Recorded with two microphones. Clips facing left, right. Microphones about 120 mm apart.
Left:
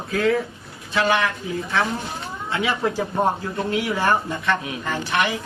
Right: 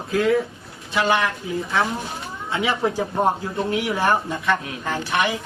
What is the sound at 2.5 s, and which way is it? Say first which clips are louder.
Speech: right 1 dB; 20° right (ahead or behind).